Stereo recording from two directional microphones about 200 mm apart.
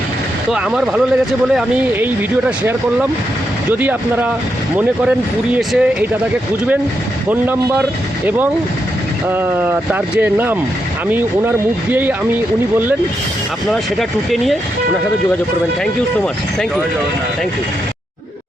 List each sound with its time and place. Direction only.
0.5 s speech: 5° right (ahead or behind)
3.7 s speech: 10° right (ahead or behind)
5.5 s speech: 5° right (ahead or behind)
7.3 s speech: 10° right (ahead or behind)
9.3 s speech: 10° right (ahead or behind)
14.3 s speech: centre (ahead or behind)